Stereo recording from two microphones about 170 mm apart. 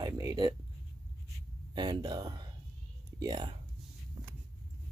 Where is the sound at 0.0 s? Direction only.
25° right (ahead or behind).